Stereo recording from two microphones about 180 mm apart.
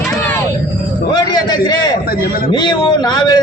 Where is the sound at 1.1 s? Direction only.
25° left (ahead or behind).